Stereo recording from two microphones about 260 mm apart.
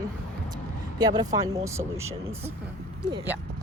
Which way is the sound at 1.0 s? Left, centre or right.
Centre.